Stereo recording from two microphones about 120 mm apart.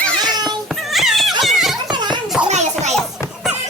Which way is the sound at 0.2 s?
35° right (ahead or behind).